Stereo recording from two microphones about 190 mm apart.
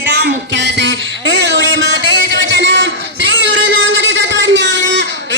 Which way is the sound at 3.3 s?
75° right (ahead or behind).